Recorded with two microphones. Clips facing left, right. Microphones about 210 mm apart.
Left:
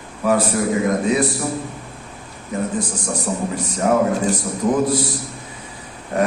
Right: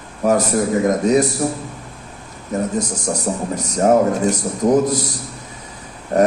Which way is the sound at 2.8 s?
40° right (ahead or behind).